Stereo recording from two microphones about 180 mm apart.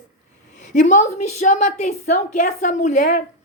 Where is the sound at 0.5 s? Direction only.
40° left (ahead or behind).